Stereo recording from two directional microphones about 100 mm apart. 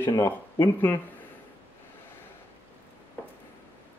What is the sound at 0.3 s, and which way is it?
Speech, 20° left (ahead or behind).